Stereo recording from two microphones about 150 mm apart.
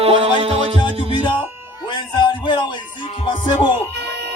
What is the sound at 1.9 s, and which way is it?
Speech, 30° left (ahead or behind).